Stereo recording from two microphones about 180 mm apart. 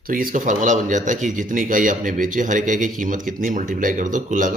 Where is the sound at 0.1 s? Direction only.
50° right (ahead or behind).